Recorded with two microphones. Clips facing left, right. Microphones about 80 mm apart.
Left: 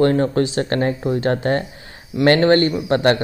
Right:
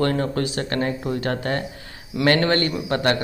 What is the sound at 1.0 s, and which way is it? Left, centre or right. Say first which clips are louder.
Speech: left 5 dB; left.